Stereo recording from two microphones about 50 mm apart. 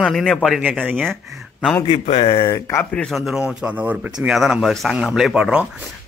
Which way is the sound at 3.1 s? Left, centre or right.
Centre.